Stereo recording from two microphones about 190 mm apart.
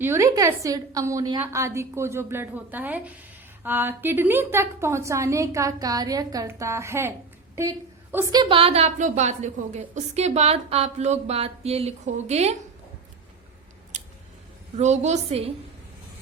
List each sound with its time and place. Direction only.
0.0 s a woman's voice: 15° right (ahead or behind); by 12.5 s 35° right (ahead or behind)
14.8 s a woman's voice: 35° right (ahead or behind)